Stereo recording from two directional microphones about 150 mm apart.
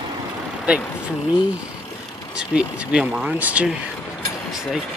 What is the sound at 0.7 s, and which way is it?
Speech, 10° right (ahead or behind).